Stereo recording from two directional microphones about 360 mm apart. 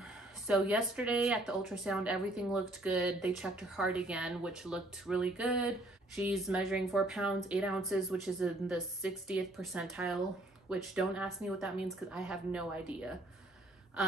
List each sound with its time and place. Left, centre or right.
0.5 s speech: centre